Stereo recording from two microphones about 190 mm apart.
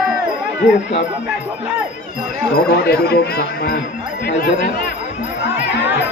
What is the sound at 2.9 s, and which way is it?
Speech, 55° left (ahead or behind).